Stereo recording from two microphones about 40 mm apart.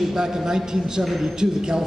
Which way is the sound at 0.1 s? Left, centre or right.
Centre.